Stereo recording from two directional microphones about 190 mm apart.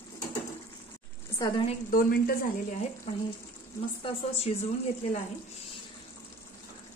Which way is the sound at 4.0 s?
30° left (ahead or behind).